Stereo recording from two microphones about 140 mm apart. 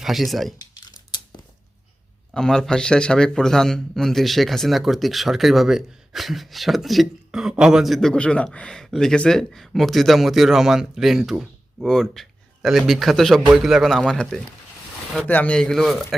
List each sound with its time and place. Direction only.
0.0 s a man's voice: centre (ahead or behind)
0.7 s a sound: 30° left (ahead or behind)
2.3 s a man's voice: 5° left (ahead or behind)